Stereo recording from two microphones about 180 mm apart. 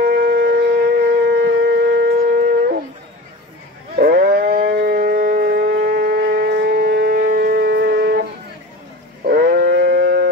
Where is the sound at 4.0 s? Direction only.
55° right (ahead or behind).